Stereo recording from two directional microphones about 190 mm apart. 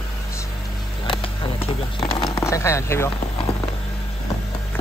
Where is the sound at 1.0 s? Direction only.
25° left (ahead or behind).